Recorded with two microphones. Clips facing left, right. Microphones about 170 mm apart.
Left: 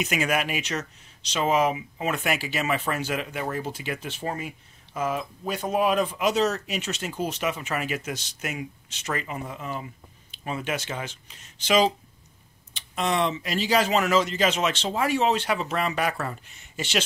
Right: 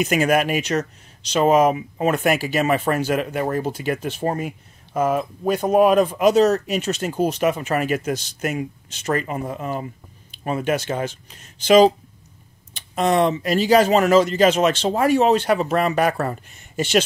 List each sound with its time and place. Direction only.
0.0 s speech: 45° right (ahead or behind)